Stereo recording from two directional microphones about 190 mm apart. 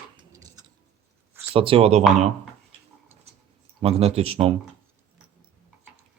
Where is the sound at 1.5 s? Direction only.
30° right (ahead or behind).